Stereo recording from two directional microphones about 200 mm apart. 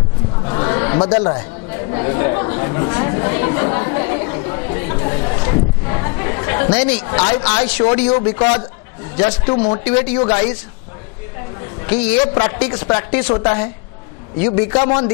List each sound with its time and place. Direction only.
0.5 s chatter: 25° left (ahead or behind)
7.8 s a woman's voice: 25° left (ahead or behind)
9.8 s speech: 15° left (ahead or behind)
11.8 s a sound: 10° left (ahead or behind)
12.4 s a woman's voice: 15° left (ahead or behind)